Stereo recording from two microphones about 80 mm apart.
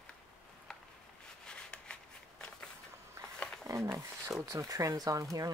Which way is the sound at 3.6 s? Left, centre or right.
Right.